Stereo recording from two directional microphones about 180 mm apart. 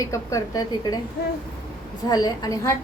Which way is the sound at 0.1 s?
20° left (ahead or behind).